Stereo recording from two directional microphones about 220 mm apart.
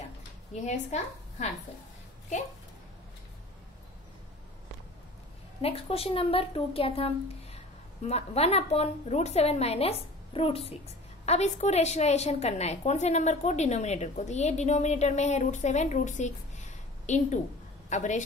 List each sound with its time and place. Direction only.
0.6 s a woman's voice: 30° left (ahead or behind)
5.6 s a woman's voice: 25° left (ahead or behind)